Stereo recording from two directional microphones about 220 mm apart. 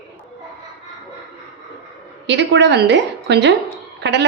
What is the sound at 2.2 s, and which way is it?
A woman's voice, 55° right (ahead or behind).